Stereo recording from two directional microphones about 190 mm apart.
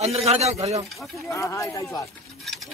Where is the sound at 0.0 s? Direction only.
35° right (ahead or behind).